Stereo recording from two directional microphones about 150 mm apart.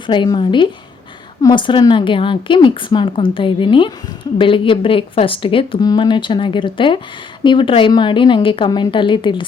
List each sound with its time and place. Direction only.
0.1 s speech: 30° left (ahead or behind)